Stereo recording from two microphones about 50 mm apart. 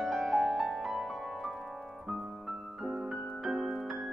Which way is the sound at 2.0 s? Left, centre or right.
Centre.